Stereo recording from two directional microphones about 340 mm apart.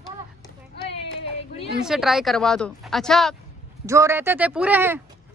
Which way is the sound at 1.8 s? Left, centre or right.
Centre.